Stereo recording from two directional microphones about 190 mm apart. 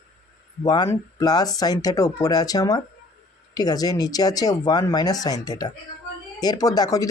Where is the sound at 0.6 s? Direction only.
20° left (ahead or behind).